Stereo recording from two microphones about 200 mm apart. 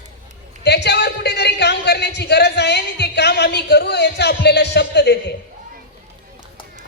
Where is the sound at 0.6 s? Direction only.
55° left (ahead or behind).